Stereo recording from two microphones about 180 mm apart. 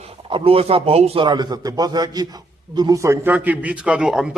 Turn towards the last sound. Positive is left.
turn(degrees=-5)  # may be behind; listen again after turning